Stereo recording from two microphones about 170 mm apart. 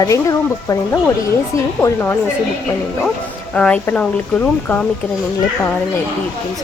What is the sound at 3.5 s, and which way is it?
Speech, 5° left (ahead or behind).